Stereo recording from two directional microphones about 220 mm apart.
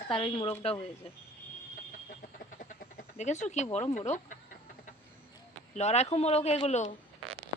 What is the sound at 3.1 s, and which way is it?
Speech, 30° left (ahead or behind).